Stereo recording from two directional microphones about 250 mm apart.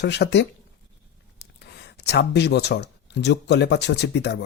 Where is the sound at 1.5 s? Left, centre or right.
Left.